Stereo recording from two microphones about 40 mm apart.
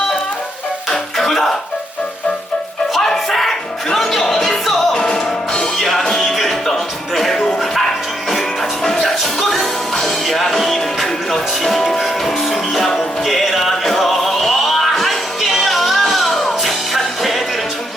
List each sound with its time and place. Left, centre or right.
0.9 s music: centre
2.9 s music: centre
4.9 s music: centre
5.7 s music: centre
9.4 s music: centre